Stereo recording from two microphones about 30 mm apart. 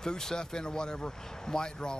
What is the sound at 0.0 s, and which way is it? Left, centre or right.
Speech, left.